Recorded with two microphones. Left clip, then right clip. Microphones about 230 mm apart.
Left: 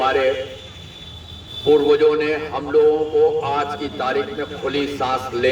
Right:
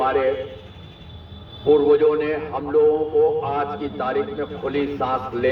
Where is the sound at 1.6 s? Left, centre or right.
Left.